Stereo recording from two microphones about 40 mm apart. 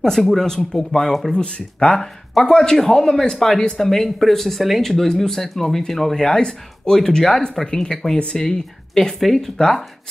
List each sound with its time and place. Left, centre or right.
0.1 s speech: centre
1.3 s speech: left
1.9 s speech: centre
6.2 s speech: centre